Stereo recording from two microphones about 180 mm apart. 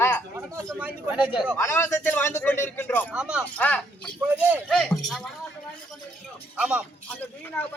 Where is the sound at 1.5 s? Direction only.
15° left (ahead or behind).